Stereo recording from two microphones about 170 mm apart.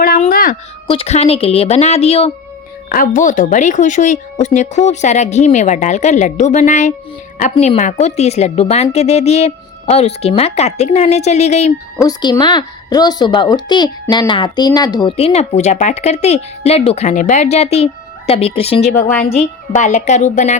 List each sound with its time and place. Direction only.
0.3 s a sound: 60° left (ahead or behind)
0.9 s speech: 35° left (ahead or behind)
2.9 s speech: 50° left (ahead or behind)
11.9 s speech: 20° left (ahead or behind)
15.1 s speech: 35° left (ahead or behind)
19.7 s speech: 45° left (ahead or behind)